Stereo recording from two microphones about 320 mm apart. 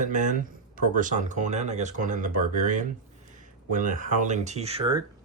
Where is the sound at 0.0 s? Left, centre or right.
Right.